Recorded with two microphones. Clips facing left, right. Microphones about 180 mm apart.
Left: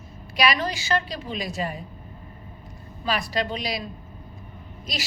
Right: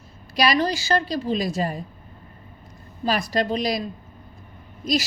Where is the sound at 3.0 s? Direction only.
40° right (ahead or behind).